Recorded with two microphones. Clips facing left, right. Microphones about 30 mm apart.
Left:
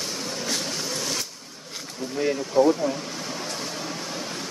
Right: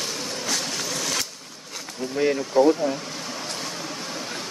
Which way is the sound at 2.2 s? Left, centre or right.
Right.